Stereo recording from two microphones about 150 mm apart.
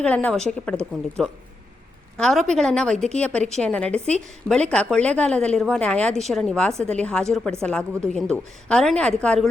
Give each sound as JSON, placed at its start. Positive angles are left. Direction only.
{"t": 0.0, "sound": "a woman's voice", "side_deg": 10}
{"t": 3.9, "sound": "a woman's voice", "side_deg": -45}
{"t": 4.4, "sound": "a woman's voice", "side_deg": 5}